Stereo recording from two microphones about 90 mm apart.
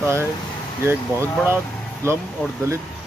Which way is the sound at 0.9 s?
25° right (ahead or behind).